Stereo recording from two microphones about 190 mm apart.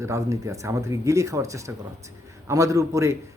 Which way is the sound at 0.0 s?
15° right (ahead or behind).